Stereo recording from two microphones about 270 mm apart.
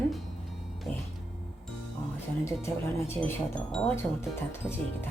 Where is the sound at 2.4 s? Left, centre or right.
Centre.